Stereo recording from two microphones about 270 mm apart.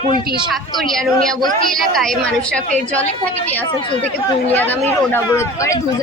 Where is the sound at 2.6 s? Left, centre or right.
Right.